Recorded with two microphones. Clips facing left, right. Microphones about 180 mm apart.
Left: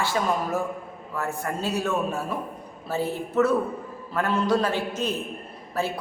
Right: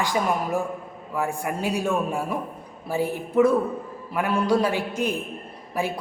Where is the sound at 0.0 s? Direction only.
15° right (ahead or behind).